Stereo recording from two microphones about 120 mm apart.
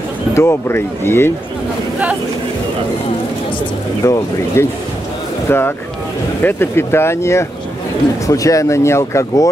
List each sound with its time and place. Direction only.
0.3 s speech: 20° left (ahead or behind)
4.0 s speech: 25° left (ahead or behind)